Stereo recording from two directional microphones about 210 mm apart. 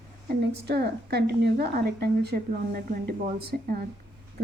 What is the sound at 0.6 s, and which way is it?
Speech, 50° right (ahead or behind).